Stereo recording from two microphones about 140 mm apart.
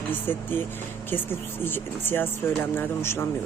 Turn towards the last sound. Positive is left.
turn(degrees=15)  # may be behind; listen again after turning